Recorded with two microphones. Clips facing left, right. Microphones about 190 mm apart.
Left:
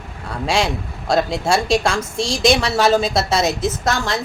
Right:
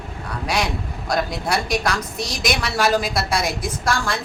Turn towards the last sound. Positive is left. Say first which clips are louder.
# left 2 dB
turn(degrees=25)  # may be behind; listen again after turning